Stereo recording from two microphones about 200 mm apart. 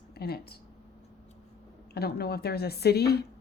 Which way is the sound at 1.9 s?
50° left (ahead or behind).